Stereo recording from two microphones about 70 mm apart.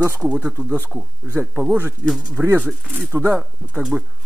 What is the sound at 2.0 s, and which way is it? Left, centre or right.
Speech, centre.